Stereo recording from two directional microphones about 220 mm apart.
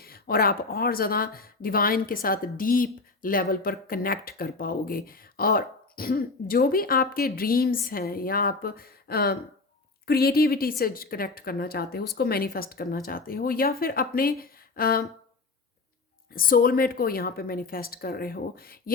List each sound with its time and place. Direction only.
0.0 s a woman's voice: 45° left (ahead or behind)
16.3 s a woman's voice: 40° left (ahead or behind)